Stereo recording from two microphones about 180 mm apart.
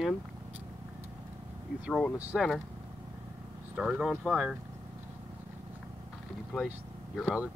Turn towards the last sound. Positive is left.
turn(degrees=5)  # may be behind; listen again after turning